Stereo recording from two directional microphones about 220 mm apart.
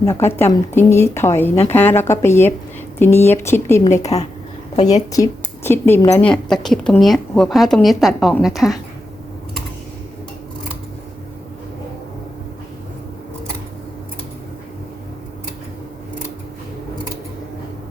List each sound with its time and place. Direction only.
0.0 s speech: 10° left (ahead or behind)
4.0 s a woman's voice: 30° left (ahead or behind)
5.1 s a woman's voice: 15° left (ahead or behind)